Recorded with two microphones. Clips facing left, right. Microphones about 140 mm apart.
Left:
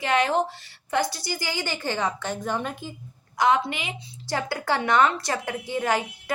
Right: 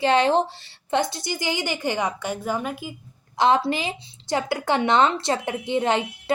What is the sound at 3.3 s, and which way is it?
Speech, 25° right (ahead or behind).